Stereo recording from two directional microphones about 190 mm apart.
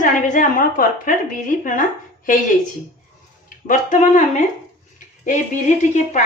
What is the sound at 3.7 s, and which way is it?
A woman's voice, 40° left (ahead or behind).